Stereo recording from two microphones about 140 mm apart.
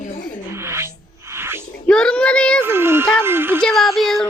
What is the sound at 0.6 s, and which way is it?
Music, 20° right (ahead or behind).